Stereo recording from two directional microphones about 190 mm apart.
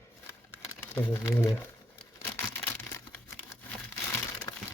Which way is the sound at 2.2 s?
15° left (ahead or behind).